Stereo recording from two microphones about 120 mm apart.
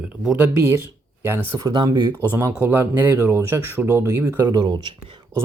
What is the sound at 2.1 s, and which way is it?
Speech, 20° right (ahead or behind).